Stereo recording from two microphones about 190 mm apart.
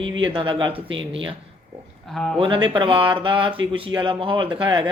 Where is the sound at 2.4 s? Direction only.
25° right (ahead or behind).